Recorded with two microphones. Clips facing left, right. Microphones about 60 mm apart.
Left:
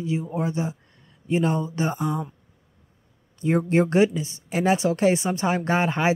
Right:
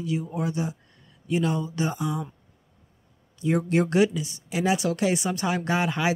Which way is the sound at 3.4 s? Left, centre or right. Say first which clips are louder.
Left 2 dB; left.